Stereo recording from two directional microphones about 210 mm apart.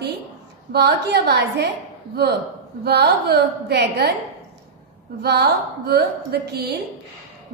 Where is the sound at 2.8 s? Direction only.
50° right (ahead or behind).